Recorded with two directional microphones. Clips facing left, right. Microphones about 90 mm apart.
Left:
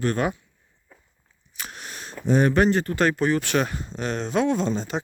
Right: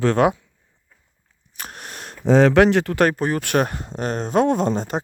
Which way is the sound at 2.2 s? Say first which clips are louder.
Right 6 dB; 90° right.